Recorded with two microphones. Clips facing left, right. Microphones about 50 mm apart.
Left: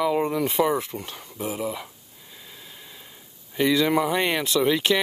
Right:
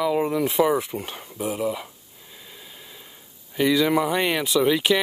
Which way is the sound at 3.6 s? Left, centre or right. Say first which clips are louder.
Right 1 dB; centre.